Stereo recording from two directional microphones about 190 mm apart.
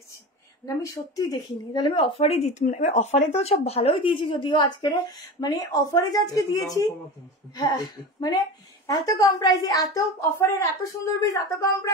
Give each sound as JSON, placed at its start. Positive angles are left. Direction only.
{"t": 0.8, "sound": "a woman's voice", "side_deg": 20}